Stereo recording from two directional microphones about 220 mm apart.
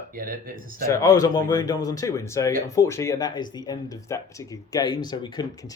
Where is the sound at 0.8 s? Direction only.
15° left (ahead or behind).